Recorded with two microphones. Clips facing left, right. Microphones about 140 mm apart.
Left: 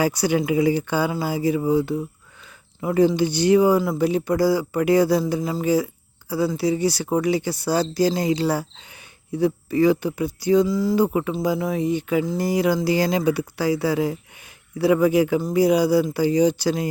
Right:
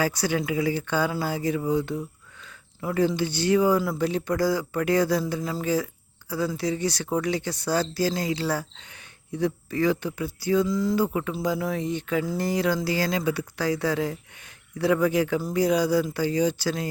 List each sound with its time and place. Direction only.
0.0 s speech: 15° left (ahead or behind)
2.8 s speech: 20° left (ahead or behind)
5.4 s speech: 25° left (ahead or behind)
5.6 s a sound: 10° left (ahead or behind)
6.6 s speech: 10° left (ahead or behind)
10.7 s speech: 5° left (ahead or behind)
10.9 s speech: 15° left (ahead or behind)